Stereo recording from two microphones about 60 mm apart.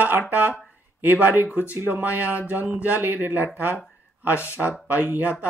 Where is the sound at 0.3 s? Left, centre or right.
Right.